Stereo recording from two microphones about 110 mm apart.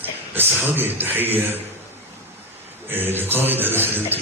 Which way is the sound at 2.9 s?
20° right (ahead or behind).